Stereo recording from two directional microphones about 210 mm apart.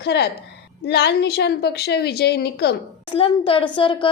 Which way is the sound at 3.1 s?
25° left (ahead or behind).